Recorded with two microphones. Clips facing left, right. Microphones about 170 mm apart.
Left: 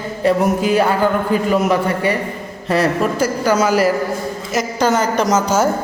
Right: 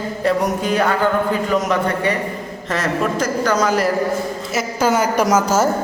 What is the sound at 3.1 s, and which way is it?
Speech, 10° left (ahead or behind).